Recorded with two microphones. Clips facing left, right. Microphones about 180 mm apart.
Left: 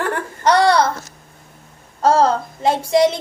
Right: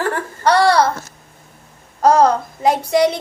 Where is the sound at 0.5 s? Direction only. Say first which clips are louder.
Right 1 dB; 20° left (ahead or behind).